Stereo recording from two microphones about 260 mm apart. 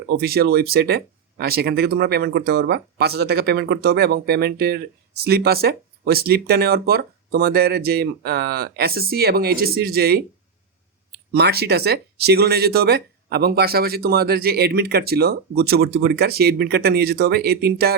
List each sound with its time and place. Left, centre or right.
0.1 s speech: right
11.3 s speech: right